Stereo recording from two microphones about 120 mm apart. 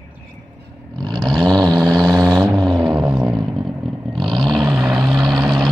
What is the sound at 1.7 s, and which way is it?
Vehicle, 30° right (ahead or behind).